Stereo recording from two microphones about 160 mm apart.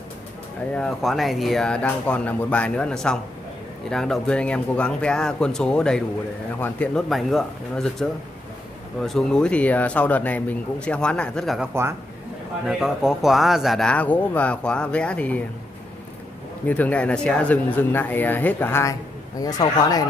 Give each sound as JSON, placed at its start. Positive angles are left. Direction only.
{"t": 0.7, "sound": "speech", "side_deg": 0}
{"t": 16.6, "sound": "speech", "side_deg": 10}